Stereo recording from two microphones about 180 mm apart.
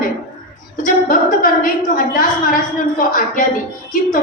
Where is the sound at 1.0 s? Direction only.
50° left (ahead or behind).